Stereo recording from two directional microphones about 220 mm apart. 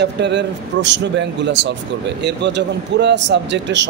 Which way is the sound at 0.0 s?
50° right (ahead or behind).